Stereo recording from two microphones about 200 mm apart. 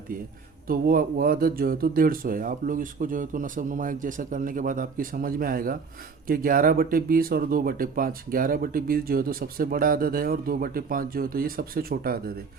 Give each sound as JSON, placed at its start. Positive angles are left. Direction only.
{"t": 0.7, "sound": "speech", "side_deg": -45}